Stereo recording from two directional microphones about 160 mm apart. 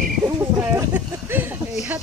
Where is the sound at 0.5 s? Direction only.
10° right (ahead or behind).